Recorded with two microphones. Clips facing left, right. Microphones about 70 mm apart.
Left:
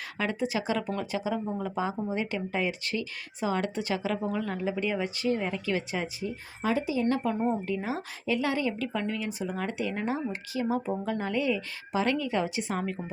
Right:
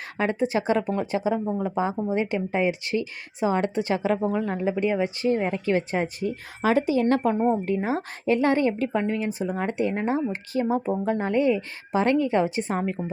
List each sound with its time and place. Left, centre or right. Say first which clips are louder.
0.2 s a woman's voice: right 6 dB; right
6.1 s speech: right 6 dB; right
7.3 s a woman's voice: right 6 dB; right